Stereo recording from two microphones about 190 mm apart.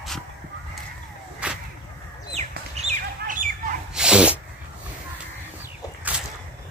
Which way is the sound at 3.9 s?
5° right (ahead or behind).